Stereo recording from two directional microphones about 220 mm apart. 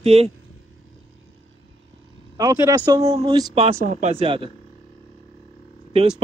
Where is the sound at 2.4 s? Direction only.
15° right (ahead or behind).